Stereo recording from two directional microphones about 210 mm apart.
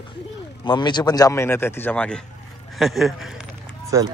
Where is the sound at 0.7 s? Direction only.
20° left (ahead or behind); by 3.3 s centre (ahead or behind).